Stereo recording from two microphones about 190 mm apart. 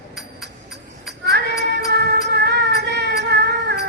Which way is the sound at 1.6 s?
60° right (ahead or behind).